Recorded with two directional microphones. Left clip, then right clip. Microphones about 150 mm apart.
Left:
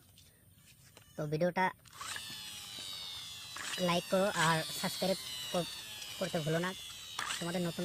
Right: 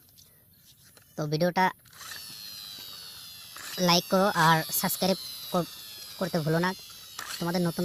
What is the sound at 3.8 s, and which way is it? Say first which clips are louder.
Speech: right 8 dB; 55° right (ahead or behind).